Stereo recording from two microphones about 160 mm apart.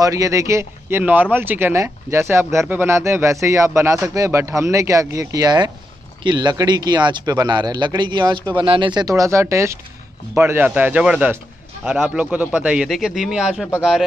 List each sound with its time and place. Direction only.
0.0 s a man's voice: 20° right (ahead or behind); by 13.7 s 5° right (ahead or behind)